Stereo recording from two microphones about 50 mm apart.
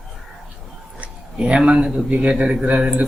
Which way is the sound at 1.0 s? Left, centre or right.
Centre.